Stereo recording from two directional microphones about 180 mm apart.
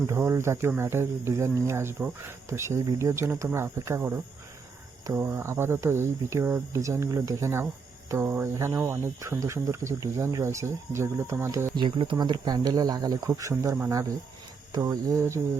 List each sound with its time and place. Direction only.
0.1 s speech: 15° right (ahead or behind)
11.8 s speech: 25° right (ahead or behind)